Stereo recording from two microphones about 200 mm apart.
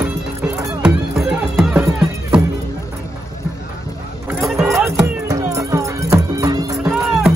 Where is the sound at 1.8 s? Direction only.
15° right (ahead or behind).